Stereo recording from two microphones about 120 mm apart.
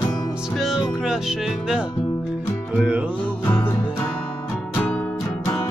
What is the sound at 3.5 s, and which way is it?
Music, 20° left (ahead or behind).